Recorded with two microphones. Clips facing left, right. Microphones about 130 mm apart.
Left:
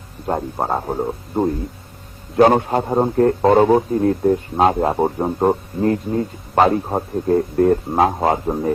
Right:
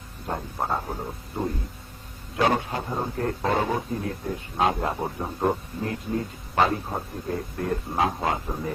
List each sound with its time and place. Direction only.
0.3 s a man's voice: 45° left (ahead or behind)
3.2 s a man's voice: 40° left (ahead or behind)